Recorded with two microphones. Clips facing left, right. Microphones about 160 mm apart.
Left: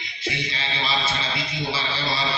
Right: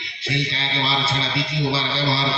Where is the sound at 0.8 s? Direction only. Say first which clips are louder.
Right 3 dB; 30° right (ahead or behind).